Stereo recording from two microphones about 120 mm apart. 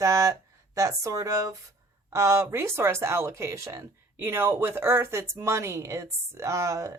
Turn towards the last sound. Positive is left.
turn(degrees=-25)  # may be behind; listen again after turning